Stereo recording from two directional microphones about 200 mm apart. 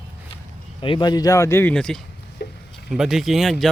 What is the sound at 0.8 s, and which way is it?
Speech, 25° left (ahead or behind).